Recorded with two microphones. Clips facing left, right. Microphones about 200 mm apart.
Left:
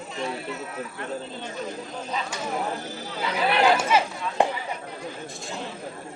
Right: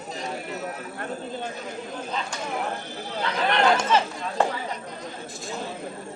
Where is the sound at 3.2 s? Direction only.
5° left (ahead or behind).